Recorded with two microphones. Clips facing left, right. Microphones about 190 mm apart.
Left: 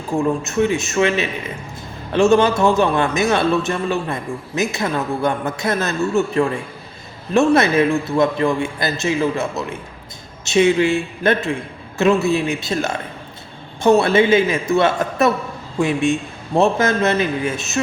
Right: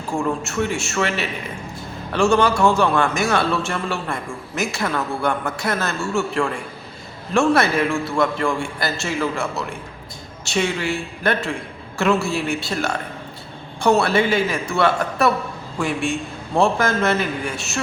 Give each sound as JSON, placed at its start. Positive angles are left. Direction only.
{"t": 0.2, "sound": "a man's voice", "side_deg": 20}